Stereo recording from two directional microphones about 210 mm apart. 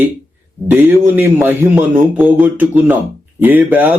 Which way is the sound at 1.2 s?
10° right (ahead or behind).